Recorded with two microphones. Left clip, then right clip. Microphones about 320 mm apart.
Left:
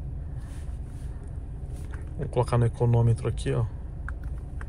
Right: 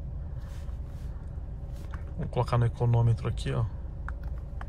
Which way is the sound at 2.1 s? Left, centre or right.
Centre.